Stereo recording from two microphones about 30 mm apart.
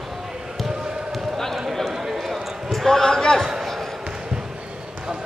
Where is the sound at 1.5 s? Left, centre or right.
Centre.